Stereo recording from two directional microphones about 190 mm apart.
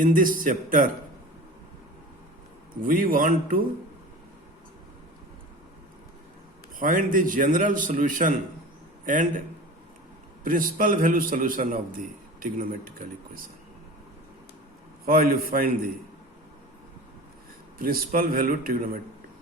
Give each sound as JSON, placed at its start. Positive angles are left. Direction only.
{"t": 0.0, "sound": "a man's voice", "side_deg": -45}
{"t": 2.8, "sound": "a man's voice", "side_deg": -45}
{"t": 6.7, "sound": "a man's voice", "side_deg": -45}
{"t": 10.4, "sound": "a man's voice", "side_deg": -45}
{"t": 15.0, "sound": "a man's voice", "side_deg": -50}
{"t": 17.7, "sound": "a man's voice", "side_deg": -50}